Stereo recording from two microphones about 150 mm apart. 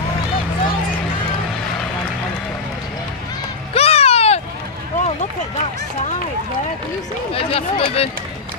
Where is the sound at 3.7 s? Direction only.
40° left (ahead or behind).